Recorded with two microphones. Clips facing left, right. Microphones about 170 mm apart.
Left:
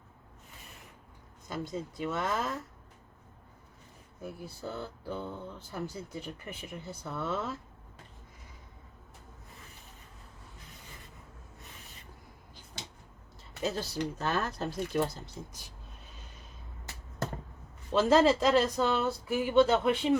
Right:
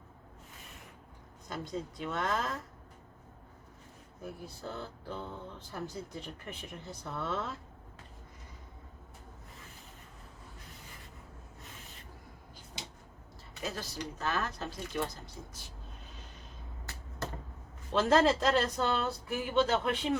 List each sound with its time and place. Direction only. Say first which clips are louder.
1.5 s speech: left 2 dB; 5° left (ahead or behind)
4.2 s speech: left 2 dB; 5° left (ahead or behind)
13.6 s speech: left 6 dB; 30° left (ahead or behind)
17.9 s speech: left 2 dB; 5° left (ahead or behind)